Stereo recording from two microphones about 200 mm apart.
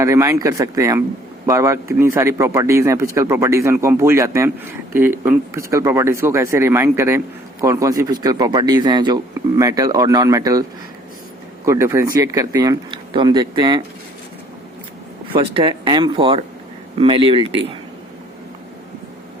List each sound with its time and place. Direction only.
0.0 s a man's voice: 15° right (ahead or behind)
11.6 s speech: 15° right (ahead or behind)
15.3 s speech: 25° right (ahead or behind)